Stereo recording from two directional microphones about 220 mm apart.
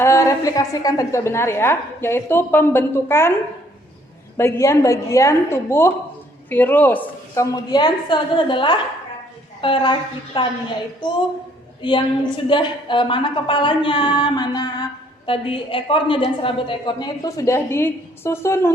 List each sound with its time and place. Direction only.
0.0 s a woman's voice: 15° left (ahead or behind)
4.4 s a woman's voice: 10° left (ahead or behind)
11.8 s a woman's voice: 20° left (ahead or behind)